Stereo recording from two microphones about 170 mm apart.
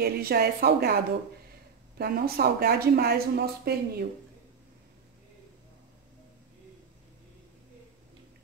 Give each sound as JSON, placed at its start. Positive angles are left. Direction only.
{"t": 0.0, "sound": "speech", "side_deg": -65}